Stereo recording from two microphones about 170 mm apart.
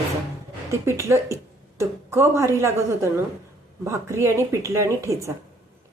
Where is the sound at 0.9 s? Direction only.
15° right (ahead or behind).